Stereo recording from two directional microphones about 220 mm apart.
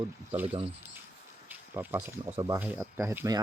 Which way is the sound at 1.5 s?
10° right (ahead or behind).